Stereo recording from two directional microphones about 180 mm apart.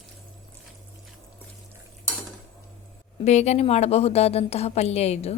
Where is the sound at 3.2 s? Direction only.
40° left (ahead or behind).